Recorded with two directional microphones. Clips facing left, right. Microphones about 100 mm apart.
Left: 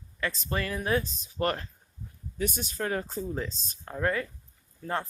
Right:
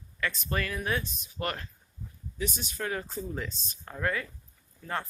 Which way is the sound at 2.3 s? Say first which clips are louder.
Left 3 dB; 45° left (ahead or behind).